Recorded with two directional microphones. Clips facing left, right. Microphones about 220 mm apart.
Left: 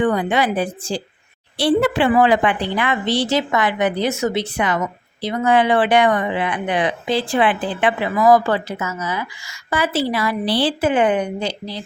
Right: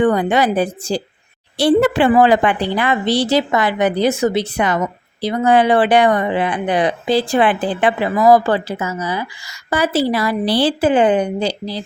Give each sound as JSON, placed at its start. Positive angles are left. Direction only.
{"t": 0.0, "sound": "speech", "side_deg": -45}